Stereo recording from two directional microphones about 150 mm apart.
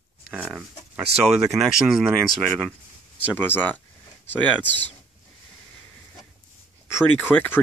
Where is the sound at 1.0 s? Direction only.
45° right (ahead or behind).